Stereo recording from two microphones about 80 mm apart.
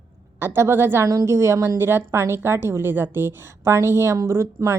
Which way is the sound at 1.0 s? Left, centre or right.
Right.